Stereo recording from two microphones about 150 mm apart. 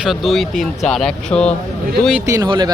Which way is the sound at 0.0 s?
Centre (ahead or behind).